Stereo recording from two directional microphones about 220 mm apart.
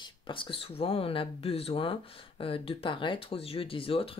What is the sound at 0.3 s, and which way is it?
Speech, 25° left (ahead or behind).